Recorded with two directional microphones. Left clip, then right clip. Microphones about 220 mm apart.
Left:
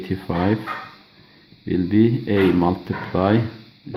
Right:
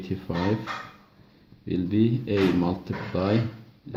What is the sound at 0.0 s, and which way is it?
Speech, 40° left (ahead or behind).